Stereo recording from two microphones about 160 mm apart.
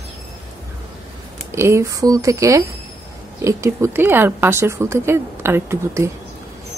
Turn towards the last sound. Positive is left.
turn(degrees=-15)  # may be behind; listen again after turning